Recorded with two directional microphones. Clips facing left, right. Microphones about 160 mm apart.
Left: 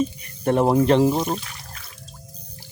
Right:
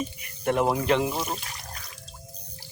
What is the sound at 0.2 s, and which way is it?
Speech, 35° left (ahead or behind).